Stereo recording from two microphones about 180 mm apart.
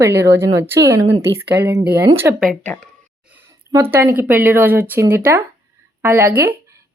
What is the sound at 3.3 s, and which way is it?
A woman's voice, 10° right (ahead or behind).